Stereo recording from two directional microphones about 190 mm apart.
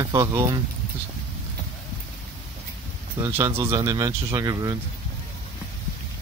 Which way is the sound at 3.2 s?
15° right (ahead or behind).